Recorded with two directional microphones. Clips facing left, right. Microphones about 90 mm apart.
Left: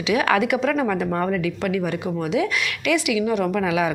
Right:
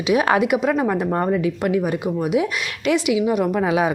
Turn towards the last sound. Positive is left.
turn(degrees=-30)  # may be behind; listen again after turning